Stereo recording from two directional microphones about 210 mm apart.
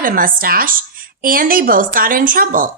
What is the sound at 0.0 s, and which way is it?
A woman's voice, 40° right (ahead or behind).